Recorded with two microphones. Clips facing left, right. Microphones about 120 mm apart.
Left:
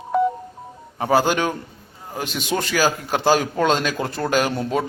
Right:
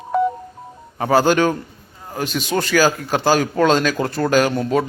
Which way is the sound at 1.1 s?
15° left (ahead or behind).